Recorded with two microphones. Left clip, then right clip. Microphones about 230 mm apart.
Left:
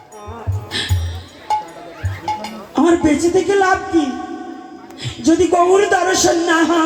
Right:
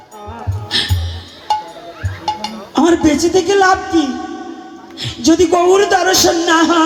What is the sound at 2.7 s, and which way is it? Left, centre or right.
A woman's voice, right.